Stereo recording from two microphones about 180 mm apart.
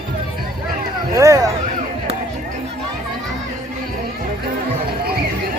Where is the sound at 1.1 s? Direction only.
20° right (ahead or behind).